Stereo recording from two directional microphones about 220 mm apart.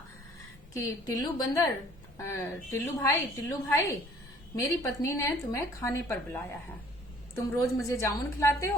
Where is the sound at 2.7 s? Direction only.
15° left (ahead or behind).